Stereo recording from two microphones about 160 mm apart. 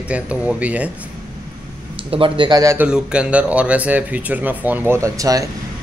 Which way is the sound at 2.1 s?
30° right (ahead or behind).